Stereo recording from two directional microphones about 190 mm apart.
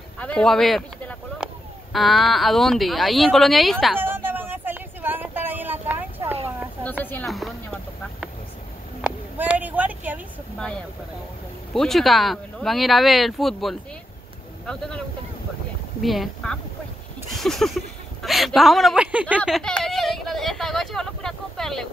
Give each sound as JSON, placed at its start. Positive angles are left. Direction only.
{"t": 0.2, "sound": "speech", "side_deg": 5}
{"t": 4.0, "sound": "vehicle", "side_deg": -10}
{"t": 6.8, "sound": "a sound", "side_deg": 10}
{"t": 11.7, "sound": "speech", "side_deg": 0}
{"t": 16.0, "sound": "speech", "side_deg": 0}
{"t": 17.3, "sound": "a sound", "side_deg": 0}